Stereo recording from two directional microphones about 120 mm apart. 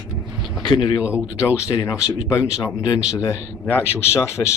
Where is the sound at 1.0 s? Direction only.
10° right (ahead or behind).